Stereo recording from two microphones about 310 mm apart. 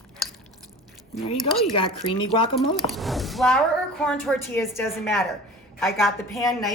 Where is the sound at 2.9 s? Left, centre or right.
Centre.